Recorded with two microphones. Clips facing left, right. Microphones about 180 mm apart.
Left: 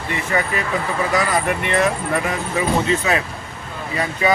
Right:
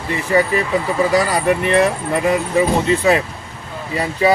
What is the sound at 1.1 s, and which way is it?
Speech, 35° right (ahead or behind).